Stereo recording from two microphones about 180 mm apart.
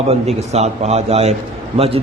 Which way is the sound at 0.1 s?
35° right (ahead or behind).